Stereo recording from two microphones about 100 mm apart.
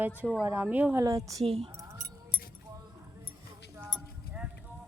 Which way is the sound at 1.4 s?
70° right (ahead or behind).